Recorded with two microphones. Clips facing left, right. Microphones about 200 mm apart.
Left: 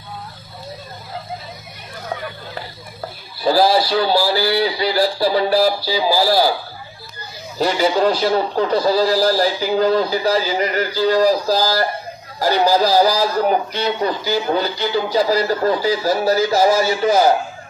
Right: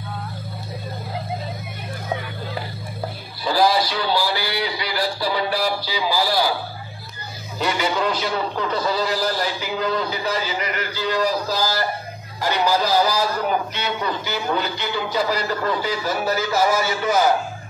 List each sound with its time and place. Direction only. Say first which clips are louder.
3.4 s a man's voice: left 4 dB; 35° left (ahead or behind)
7.5 s a man's voice: left 6 dB; 35° left (ahead or behind)